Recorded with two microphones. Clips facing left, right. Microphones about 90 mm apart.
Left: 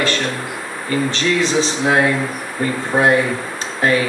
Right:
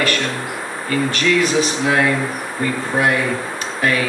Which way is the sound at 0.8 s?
30° left (ahead or behind).